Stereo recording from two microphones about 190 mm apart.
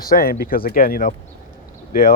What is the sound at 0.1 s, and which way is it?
Speech, 50° left (ahead or behind).